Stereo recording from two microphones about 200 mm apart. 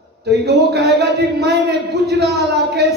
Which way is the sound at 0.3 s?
55° right (ahead or behind).